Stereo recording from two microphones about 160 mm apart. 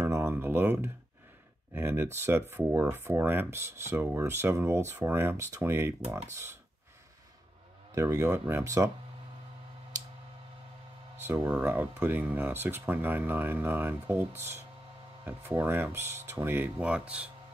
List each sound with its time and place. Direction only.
0.0 s a sound: 15° right (ahead or behind)
1.7 s speech: 15° right (ahead or behind)
7.9 s speech: 20° right (ahead or behind)
11.2 s speech: 10° right (ahead or behind)